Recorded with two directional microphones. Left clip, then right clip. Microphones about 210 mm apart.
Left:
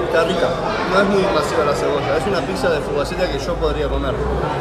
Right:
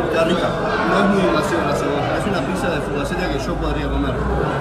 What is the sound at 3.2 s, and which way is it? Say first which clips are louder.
Speech: left 3 dB; centre (ahead or behind).